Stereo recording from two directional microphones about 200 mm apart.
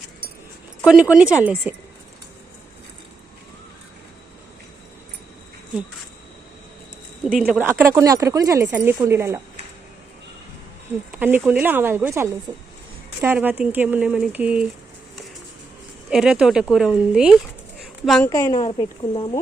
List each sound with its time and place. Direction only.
0.9 s speech: 5° right (ahead or behind)
7.3 s speech: 5° right (ahead or behind)
11.1 s speech: 10° right (ahead or behind)
16.0 s speech: 5° right (ahead or behind)
18.3 s a woman's voice: 15° left (ahead or behind)
18.6 s speech: 25° left (ahead or behind)